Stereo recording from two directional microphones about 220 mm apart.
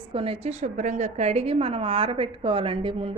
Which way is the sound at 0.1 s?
25° right (ahead or behind).